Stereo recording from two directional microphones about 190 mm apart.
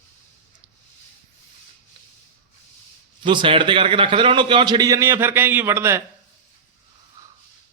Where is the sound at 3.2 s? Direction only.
25° right (ahead or behind).